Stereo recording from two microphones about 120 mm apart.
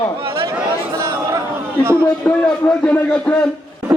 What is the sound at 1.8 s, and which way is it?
Speech, 20° right (ahead or behind).